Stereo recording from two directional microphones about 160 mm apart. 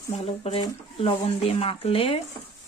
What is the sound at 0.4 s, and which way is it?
Speech, 35° left (ahead or behind).